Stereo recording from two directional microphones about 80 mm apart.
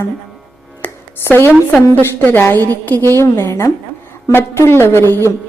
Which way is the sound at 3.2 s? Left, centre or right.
Left.